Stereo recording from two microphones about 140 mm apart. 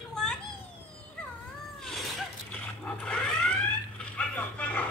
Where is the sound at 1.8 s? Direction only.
Centre (ahead or behind).